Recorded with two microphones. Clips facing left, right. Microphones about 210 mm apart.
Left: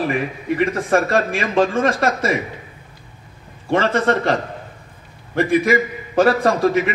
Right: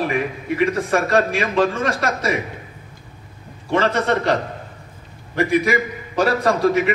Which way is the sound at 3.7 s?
55° left (ahead or behind).